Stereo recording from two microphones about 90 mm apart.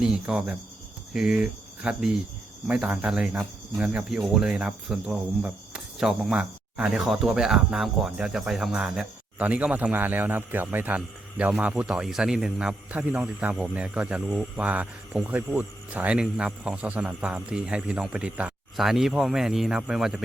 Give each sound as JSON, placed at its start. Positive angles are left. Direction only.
{"t": 0.0, "sound": "speech", "side_deg": -5}
{"t": 1.1, "sound": "cricket", "side_deg": -5}
{"t": 2.6, "sound": "speech", "side_deg": -15}
{"t": 4.9, "sound": "speech", "side_deg": -5}